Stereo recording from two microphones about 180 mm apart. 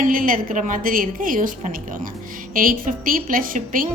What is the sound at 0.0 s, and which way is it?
A woman's voice, 50° right (ahead or behind).